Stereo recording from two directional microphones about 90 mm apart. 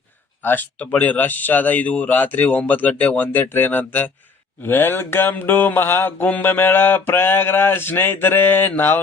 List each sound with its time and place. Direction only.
0.4 s mantra: 20° left (ahead or behind)